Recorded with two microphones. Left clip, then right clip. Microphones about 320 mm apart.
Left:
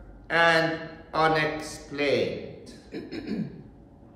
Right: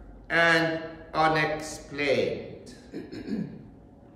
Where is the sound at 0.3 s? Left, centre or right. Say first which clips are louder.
Left 1 dB; centre.